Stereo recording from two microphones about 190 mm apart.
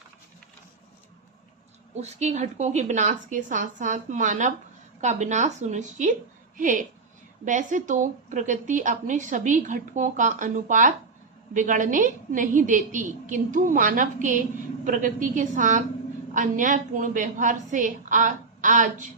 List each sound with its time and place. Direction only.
2.0 s a woman's voice: 35° right (ahead or behind)
7.4 s a woman's voice: 40° right (ahead or behind)